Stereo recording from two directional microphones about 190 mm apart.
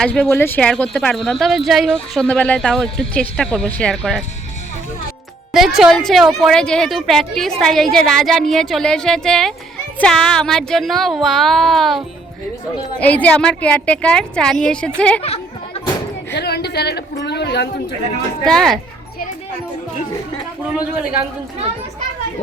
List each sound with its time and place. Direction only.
0.0 s speech: 5° left (ahead or behind)
5.5 s speech: centre (ahead or behind)
15.2 s a sound: 30° left (ahead or behind)
16.3 s speech: 60° left (ahead or behind)
18.4 s speech: centre (ahead or behind)
20.7 s speech: 5° right (ahead or behind)